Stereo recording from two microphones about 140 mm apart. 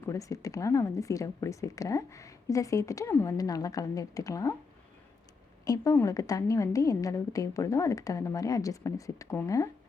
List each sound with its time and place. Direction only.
0.0 s a woman's voice: 25° left (ahead or behind)
5.6 s a woman's voice: 25° left (ahead or behind)